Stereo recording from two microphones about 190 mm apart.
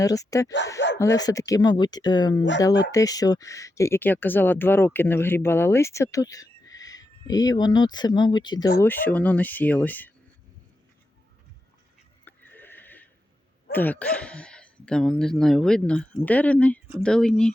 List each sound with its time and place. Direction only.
0.0 s speech: 20° left (ahead or behind)
8.8 s speech: 10° left (ahead or behind)
12.2 s neigh: 10° left (ahead or behind)
13.7 s speech: 10° left (ahead or behind)